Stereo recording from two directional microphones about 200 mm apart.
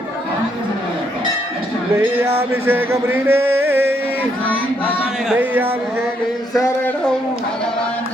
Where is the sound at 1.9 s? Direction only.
10° right (ahead or behind).